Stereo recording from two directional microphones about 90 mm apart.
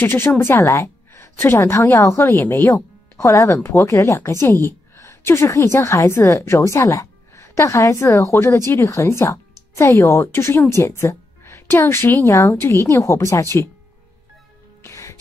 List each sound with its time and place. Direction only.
0.0 s a woman's voice: 25° left (ahead or behind)
3.5 s speech: 20° left (ahead or behind)
3.8 s a woman's voice: 35° left (ahead or behind)
14.8 s music: 35° left (ahead or behind)